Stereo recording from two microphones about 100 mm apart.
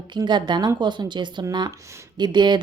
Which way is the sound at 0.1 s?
50° right (ahead or behind).